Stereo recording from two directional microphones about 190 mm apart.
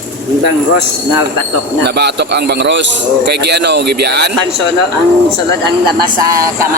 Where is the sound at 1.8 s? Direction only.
60° right (ahead or behind).